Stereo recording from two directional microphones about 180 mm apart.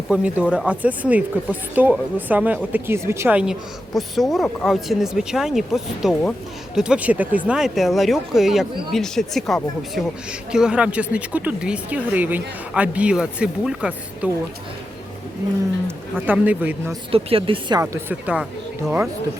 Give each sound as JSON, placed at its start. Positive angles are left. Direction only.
{"t": 0.1, "sound": "speech", "side_deg": -5}
{"t": 16.1, "sound": "speech", "side_deg": -10}
{"t": 17.1, "sound": "speech", "side_deg": -30}
{"t": 17.7, "sound": "speech", "side_deg": -10}